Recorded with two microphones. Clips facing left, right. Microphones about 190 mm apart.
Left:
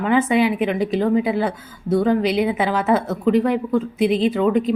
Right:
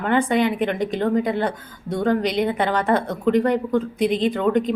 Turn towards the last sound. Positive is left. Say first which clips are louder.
# left 2 dB
turn(degrees=5)  # may be behind; listen again after turning